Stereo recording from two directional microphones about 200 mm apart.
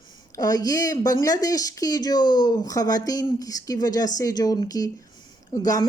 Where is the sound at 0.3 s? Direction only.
20° left (ahead or behind).